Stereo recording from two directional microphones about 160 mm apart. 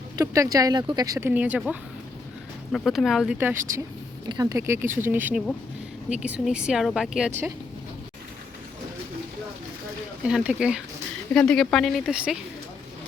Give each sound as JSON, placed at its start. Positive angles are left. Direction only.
{"t": 0.2, "sound": "speech", "side_deg": -20}
{"t": 1.3, "sound": "speech", "side_deg": -10}
{"t": 3.3, "sound": "speech", "side_deg": -15}
{"t": 10.2, "sound": "speech", "side_deg": -5}
{"t": 11.3, "sound": "speech", "side_deg": 5}